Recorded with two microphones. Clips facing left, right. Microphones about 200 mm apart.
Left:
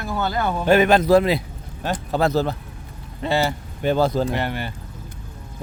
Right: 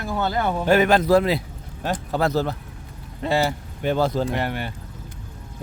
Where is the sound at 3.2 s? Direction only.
Centre (ahead or behind).